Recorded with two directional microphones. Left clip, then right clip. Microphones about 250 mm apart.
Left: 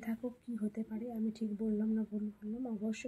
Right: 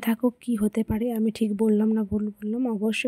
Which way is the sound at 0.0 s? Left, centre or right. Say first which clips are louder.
Right 16 dB; right.